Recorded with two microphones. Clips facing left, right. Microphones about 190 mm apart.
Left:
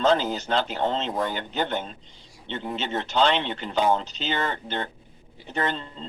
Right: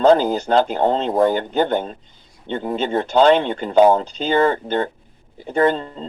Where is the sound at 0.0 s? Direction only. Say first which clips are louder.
Right 8 dB; 40° right (ahead or behind).